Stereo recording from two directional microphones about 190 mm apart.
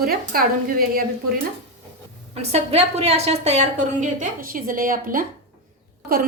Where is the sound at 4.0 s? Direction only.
45° right (ahead or behind).